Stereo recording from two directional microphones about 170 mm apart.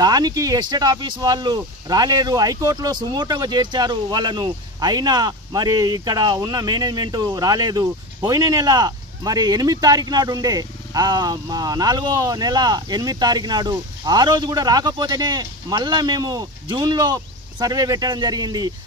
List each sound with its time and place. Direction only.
0.0 s speech: 25° right (ahead or behind)